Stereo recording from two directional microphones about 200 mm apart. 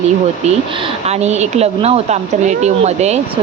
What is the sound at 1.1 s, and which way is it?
Speech, 35° right (ahead or behind).